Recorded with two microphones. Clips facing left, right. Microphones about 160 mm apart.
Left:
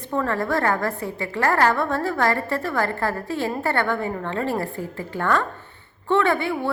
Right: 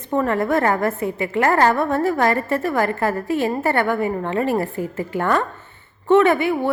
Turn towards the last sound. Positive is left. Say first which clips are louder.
# right 5 dB
turn(degrees=-15)  # may be behind; listen again after turning